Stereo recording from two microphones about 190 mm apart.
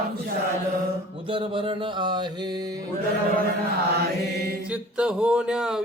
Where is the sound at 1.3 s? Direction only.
25° right (ahead or behind).